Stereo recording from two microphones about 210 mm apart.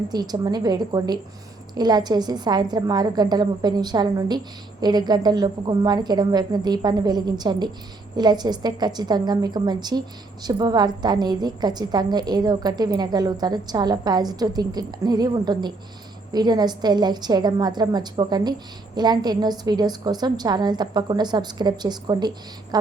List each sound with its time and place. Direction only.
0.1 s a woman's voice: 20° right (ahead or behind)